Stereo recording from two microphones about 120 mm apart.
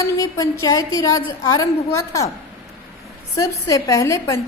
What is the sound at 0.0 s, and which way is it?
A woman's voice, 30° left (ahead or behind).